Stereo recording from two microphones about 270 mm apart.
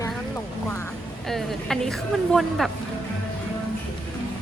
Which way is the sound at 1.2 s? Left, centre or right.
Centre.